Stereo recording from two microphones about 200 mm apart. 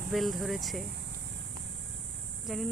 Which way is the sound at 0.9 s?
55° right (ahead or behind).